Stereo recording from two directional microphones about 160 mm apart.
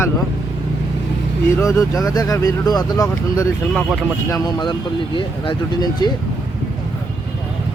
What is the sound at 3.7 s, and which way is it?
Speech, 5° right (ahead or behind).